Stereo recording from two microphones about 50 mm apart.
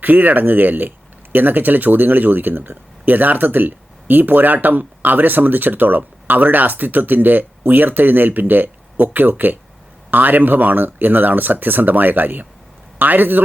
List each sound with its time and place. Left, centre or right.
0.0 s speech: right